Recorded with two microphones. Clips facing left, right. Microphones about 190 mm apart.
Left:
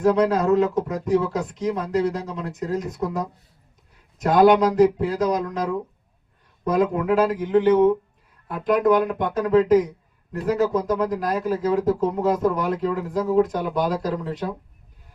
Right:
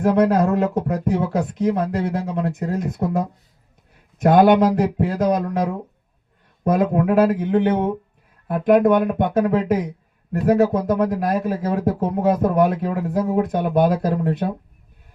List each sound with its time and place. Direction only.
0.2 s speech: 60° right (ahead or behind)
4.2 s speech: 55° right (ahead or behind)
6.7 s speech: 55° right (ahead or behind)